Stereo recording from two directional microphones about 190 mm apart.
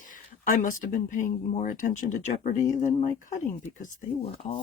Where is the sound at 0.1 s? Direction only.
45° left (ahead or behind).